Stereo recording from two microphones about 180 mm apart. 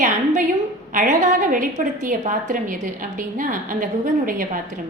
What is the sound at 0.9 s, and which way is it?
A woman's voice, 45° right (ahead or behind).